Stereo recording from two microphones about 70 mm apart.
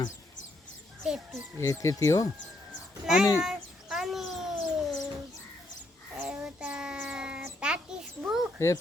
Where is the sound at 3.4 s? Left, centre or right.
Centre.